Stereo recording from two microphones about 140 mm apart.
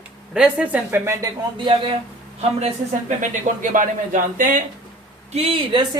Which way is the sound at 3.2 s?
65° right (ahead or behind).